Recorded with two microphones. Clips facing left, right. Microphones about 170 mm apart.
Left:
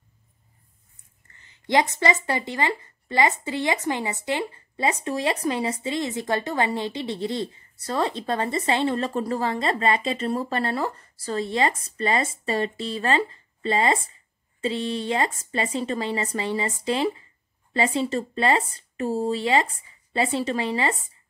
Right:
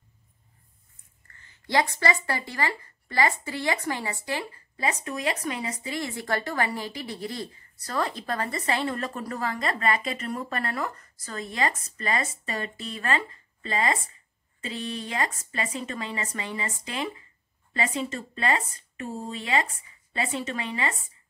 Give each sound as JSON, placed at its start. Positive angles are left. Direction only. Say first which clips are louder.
{"t": 1.2, "sound": "speech", "louder": "left 6 dB", "side_deg": 20}